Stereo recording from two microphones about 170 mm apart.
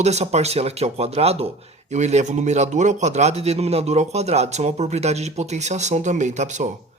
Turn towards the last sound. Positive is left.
turn(degrees=-45)  # may be behind; listen again after turning